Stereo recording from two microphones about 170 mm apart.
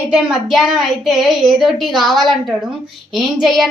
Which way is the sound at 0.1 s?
5° right (ahead or behind).